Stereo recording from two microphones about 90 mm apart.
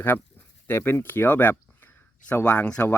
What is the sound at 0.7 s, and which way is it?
Speech, 25° left (ahead or behind).